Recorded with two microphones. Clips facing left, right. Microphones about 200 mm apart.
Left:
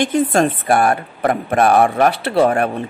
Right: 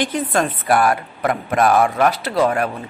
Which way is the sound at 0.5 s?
30° left (ahead or behind).